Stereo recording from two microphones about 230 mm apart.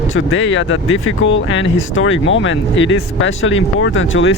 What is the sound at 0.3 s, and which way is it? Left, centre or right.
Speech, left.